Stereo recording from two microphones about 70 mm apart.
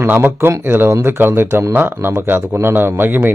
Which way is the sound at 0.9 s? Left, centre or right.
Right.